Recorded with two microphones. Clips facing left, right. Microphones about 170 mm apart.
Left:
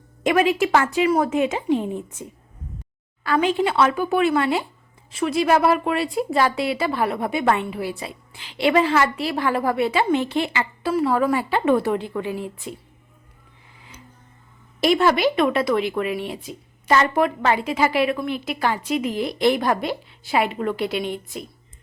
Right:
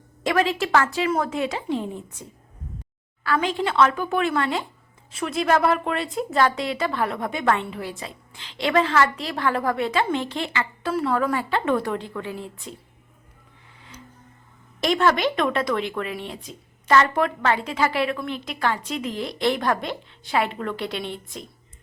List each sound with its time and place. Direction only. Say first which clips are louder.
0.2 s speech: left 4 dB; 15° left (ahead or behind)
3.2 s speech: left 4 dB; 15° left (ahead or behind)
14.8 s speech: left 3 dB; 10° left (ahead or behind)